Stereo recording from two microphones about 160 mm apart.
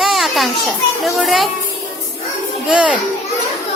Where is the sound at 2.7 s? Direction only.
5° right (ahead or behind).